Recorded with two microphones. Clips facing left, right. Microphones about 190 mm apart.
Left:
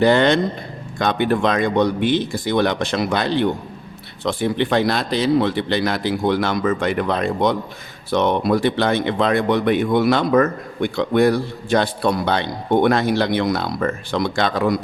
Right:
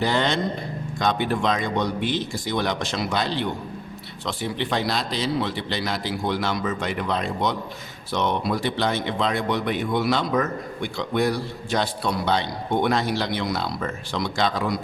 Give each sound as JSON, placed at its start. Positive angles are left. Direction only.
{"t": 0.0, "sound": "speech", "side_deg": 60}